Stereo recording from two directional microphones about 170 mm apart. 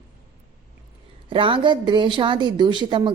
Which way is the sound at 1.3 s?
30° right (ahead or behind).